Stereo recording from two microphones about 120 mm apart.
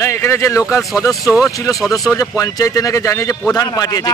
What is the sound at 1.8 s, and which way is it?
Speech, centre (ahead or behind).